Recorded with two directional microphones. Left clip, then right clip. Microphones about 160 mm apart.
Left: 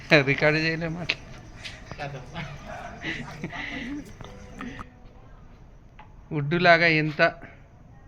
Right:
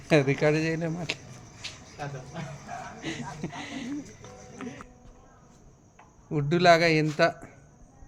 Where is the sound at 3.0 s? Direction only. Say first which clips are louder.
Left 3 dB; 15° right (ahead or behind).